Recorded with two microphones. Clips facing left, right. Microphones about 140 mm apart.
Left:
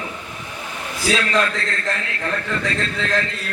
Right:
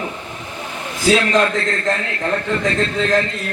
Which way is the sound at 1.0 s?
25° right (ahead or behind).